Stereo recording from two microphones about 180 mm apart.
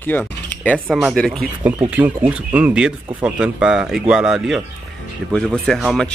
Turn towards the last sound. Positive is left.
turn(degrees=0)  # may be behind; listen again after turning